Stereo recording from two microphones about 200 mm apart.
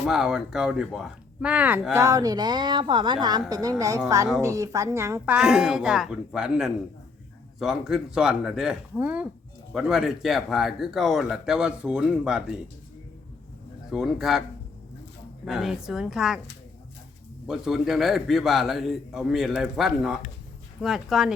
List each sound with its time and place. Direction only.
0.0 s a woman's voice: centre (ahead or behind)
13.9 s speech: centre (ahead or behind)
15.4 s speech: centre (ahead or behind)
17.4 s speech: centre (ahead or behind)